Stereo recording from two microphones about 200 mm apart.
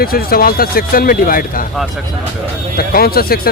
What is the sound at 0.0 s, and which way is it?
Speech, 50° left (ahead or behind).